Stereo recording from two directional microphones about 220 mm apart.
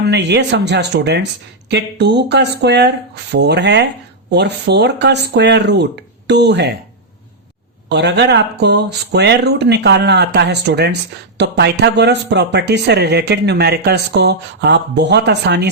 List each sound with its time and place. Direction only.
0.0 s speech: 50° right (ahead or behind)
7.9 s speech: 50° right (ahead or behind)